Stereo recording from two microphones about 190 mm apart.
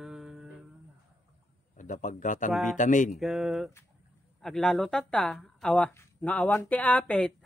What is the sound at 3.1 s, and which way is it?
Speech, centre (ahead or behind).